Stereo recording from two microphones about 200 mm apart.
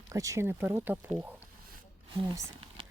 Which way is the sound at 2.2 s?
20° right (ahead or behind).